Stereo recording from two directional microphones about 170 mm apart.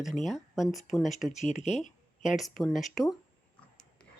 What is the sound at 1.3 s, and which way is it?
Speech, 40° left (ahead or behind).